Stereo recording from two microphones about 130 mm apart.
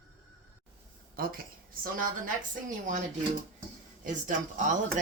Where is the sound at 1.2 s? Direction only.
90° right.